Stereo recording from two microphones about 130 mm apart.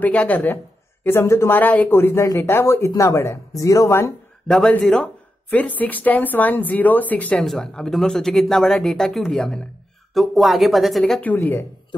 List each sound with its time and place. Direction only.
0.0 s a woman's voice: 10° left (ahead or behind)
4.5 s a woman's voice: 5° left (ahead or behind)
11.3 s a woman's voice: 15° left (ahead or behind)